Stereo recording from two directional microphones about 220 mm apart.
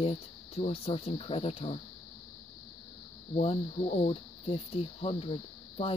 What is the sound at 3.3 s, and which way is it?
Speech, 30° left (ahead or behind).